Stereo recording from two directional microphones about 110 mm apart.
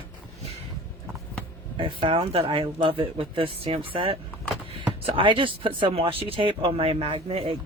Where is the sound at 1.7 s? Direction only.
50° right (ahead or behind).